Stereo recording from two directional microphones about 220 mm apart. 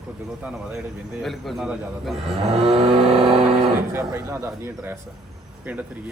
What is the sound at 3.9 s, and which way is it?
A man's voice, 10° right (ahead or behind).